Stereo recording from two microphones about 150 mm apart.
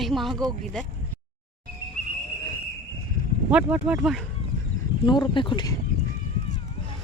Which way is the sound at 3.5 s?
5° right (ahead or behind).